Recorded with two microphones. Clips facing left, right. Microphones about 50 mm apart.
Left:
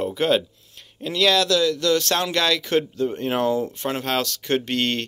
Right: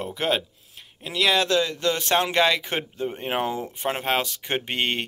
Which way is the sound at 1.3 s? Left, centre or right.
Right.